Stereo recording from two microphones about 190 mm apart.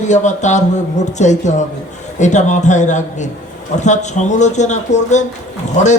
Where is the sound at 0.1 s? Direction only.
40° left (ahead or behind).